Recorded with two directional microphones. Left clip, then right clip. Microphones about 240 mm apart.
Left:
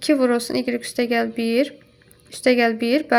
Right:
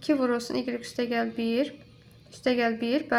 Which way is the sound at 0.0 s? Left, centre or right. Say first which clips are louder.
Left 7 dB; left.